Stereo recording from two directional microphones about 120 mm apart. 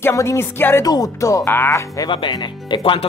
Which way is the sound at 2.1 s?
40° left (ahead or behind).